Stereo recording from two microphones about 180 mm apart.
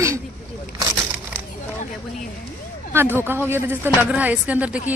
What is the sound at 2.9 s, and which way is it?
Speech, 15° right (ahead or behind).